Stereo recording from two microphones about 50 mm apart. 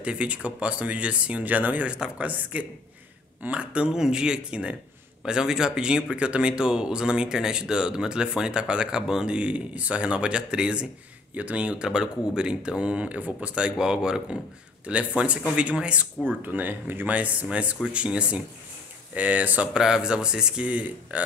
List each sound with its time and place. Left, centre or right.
0.0 s speech: right
14.9 s speech: right
16.4 s speech: right
19.7 s speech: centre
20.6 s speech: right